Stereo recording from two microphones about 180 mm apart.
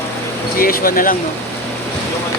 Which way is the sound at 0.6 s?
55° left (ahead or behind).